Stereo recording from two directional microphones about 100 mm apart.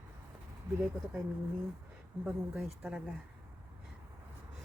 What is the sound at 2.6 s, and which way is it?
Speech, 10° right (ahead or behind).